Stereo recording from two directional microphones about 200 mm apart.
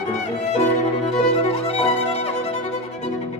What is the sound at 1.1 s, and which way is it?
Violin, 30° left (ahead or behind).